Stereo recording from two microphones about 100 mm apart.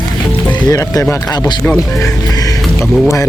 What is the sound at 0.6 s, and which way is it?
Speech, 35° left (ahead or behind).